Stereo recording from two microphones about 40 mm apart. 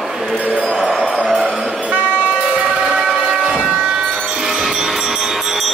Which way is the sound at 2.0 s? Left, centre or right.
Left.